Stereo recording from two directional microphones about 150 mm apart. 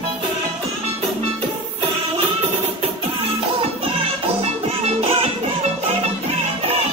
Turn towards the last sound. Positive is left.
turn(degrees=-40)  # may be behind; listen again after turning